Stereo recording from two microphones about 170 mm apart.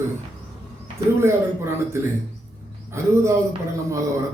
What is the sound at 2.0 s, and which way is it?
A man's voice, 15° right (ahead or behind).